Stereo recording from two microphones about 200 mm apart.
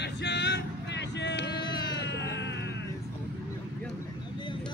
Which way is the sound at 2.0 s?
60° left (ahead or behind).